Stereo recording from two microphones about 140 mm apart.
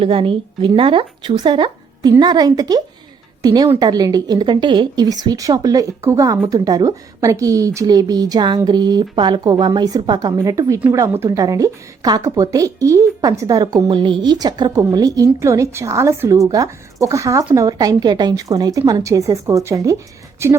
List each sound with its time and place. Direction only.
0.0 s a woman's voice: 40° right (ahead or behind); by 20.6 s 20° right (ahead or behind)